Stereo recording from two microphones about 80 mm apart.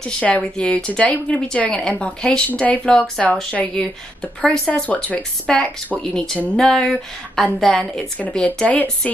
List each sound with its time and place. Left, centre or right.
0.0 s a woman's voice: centre
8.2 s speech: centre